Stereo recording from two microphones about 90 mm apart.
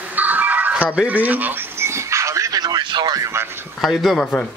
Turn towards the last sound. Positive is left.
turn(degrees=0)  # may be behind; listen again after turning